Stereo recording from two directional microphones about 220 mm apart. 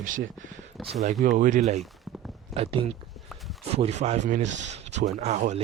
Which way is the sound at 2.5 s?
25° right (ahead or behind).